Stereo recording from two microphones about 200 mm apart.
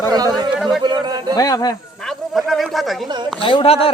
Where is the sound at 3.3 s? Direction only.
25° left (ahead or behind).